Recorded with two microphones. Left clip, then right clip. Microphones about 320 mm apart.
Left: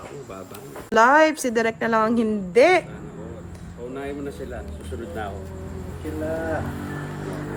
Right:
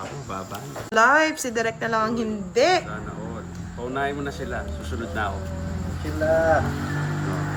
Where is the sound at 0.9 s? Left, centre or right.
Left.